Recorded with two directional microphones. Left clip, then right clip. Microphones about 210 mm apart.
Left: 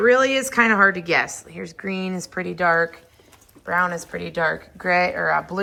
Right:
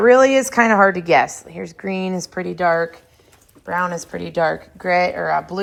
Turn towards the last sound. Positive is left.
turn(degrees=-10)  # may be behind; listen again after turning